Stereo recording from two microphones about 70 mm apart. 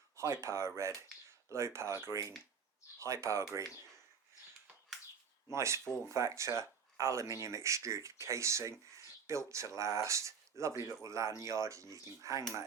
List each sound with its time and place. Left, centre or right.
0.2 s speech: right
5.5 s speech: right